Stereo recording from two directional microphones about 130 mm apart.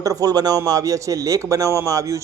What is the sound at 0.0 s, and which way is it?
Speech, 25° right (ahead or behind).